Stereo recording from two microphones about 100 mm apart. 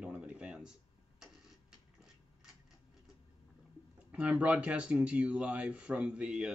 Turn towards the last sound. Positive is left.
turn(degrees=-10)  # may be behind; listen again after turning